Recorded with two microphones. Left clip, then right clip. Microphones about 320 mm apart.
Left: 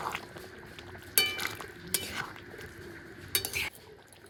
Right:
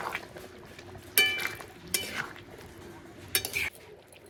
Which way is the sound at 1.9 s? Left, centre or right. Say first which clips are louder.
Right 2 dB; left.